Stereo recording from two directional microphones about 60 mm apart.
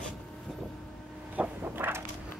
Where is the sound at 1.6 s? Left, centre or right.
Right.